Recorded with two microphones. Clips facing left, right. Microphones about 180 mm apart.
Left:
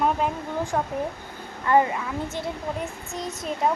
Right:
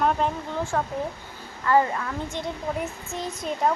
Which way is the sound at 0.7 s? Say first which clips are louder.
Even; 15° left (ahead or behind).